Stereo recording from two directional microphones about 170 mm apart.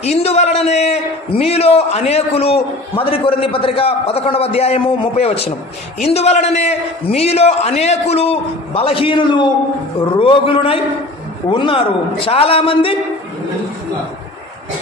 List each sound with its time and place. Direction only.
0.0 s a man's voice: 40° left (ahead or behind)